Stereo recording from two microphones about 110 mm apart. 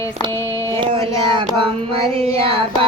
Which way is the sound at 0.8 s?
50° right (ahead or behind).